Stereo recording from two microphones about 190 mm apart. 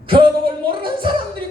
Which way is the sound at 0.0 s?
25° right (ahead or behind).